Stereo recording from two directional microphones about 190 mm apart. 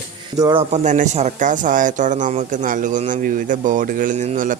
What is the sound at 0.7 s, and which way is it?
Speech, 40° right (ahead or behind).